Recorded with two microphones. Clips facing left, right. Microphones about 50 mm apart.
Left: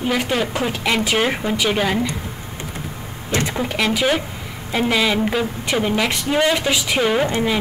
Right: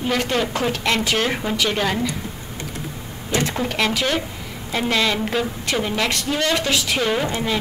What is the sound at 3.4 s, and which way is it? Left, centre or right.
A woman's voice, centre.